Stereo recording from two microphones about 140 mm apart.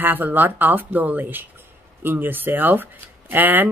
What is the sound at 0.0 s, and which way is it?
Speech, 15° right (ahead or behind).